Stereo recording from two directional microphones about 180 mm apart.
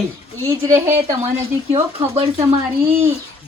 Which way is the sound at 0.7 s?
15° right (ahead or behind).